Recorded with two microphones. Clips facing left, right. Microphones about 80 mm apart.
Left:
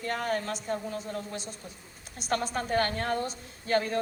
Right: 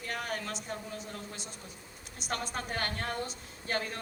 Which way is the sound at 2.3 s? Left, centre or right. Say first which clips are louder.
Left 7 dB; left.